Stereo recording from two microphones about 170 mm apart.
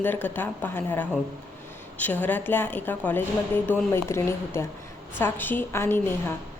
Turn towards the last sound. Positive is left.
turn(degrees=15)  # may be behind; listen again after turning